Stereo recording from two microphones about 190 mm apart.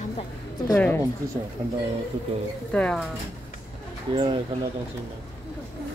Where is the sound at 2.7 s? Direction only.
5° left (ahead or behind).